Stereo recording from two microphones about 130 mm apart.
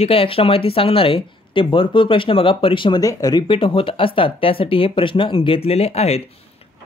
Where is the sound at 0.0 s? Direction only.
45° left (ahead or behind).